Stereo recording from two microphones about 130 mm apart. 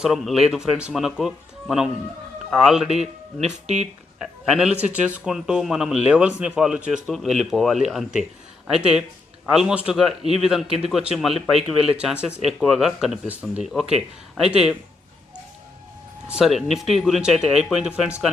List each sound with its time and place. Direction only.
0.0 s a man's voice: centre (ahead or behind)
3.4 s speech: 60° right (ahead or behind)
4.2 s a man's voice: 5° right (ahead or behind)
16.2 s a man's voice: 5° right (ahead or behind)